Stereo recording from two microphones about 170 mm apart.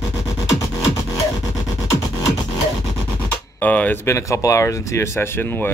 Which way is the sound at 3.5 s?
10° left (ahead or behind).